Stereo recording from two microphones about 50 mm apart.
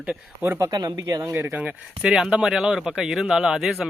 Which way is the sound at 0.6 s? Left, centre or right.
Right.